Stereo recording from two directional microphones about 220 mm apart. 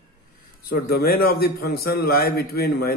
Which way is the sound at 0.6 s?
45° left (ahead or behind).